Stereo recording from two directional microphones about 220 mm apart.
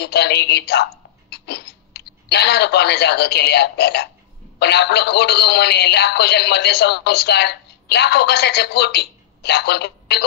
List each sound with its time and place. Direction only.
0.0 s speech: 50° left (ahead or behind)